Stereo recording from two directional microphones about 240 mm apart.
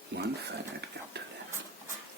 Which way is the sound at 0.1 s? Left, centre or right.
Right.